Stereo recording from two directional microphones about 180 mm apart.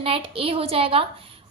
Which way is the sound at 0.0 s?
30° right (ahead or behind).